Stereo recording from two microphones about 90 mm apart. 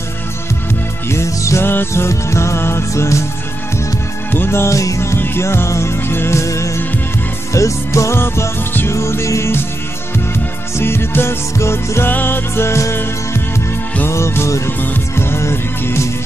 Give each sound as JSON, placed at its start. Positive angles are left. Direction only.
{"t": 1.0, "sound": "music", "side_deg": 30}
{"t": 4.3, "sound": "music", "side_deg": 25}
{"t": 10.8, "sound": "music", "side_deg": 25}